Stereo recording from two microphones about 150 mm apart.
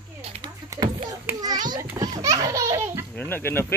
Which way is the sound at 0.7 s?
25° right (ahead or behind).